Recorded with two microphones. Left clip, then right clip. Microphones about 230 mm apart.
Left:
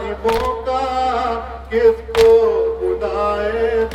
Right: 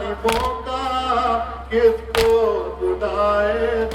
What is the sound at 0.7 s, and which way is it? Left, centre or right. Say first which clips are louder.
Music: left 6 dB; centre.